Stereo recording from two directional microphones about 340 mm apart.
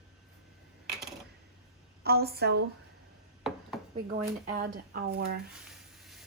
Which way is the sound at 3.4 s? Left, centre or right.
Centre.